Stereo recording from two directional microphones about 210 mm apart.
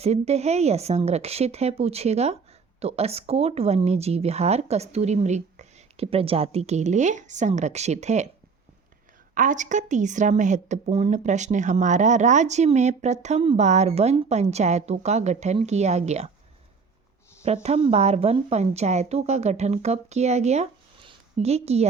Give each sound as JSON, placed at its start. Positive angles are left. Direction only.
{"t": 0.0, "sound": "a woman's voice", "side_deg": -30}
{"t": 9.3, "sound": "a woman's voice", "side_deg": -40}
{"t": 17.4, "sound": "a woman's voice", "side_deg": -30}